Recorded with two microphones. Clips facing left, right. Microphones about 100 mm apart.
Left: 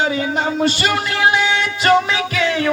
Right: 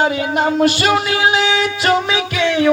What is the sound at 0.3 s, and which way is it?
Music, 5° right (ahead or behind).